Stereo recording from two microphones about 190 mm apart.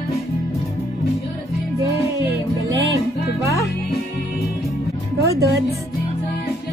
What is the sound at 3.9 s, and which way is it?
Music, 55° left (ahead or behind).